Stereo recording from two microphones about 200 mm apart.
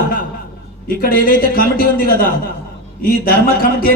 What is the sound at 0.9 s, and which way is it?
A man's voice, 45° left (ahead or behind).